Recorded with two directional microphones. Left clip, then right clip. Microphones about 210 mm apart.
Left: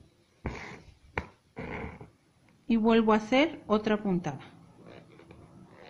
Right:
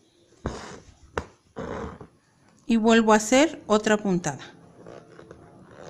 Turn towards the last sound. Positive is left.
turn(degrees=-60)  # may be behind; listen again after turning